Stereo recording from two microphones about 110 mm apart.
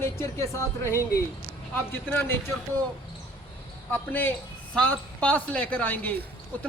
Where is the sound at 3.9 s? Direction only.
15° left (ahead or behind).